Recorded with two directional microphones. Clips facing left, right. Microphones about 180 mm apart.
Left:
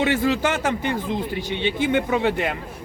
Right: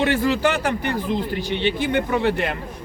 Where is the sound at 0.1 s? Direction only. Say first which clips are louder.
Right 1 dB; 20° left (ahead or behind).